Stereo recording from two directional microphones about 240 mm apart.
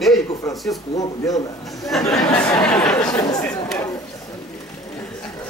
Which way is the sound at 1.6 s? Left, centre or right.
Centre.